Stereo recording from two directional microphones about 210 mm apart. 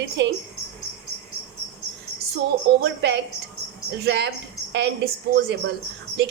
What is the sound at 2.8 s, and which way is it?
A woman's voice, 55° right (ahead or behind).